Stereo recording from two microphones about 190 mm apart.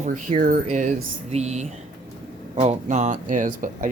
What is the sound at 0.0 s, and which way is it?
Speech, 40° right (ahead or behind).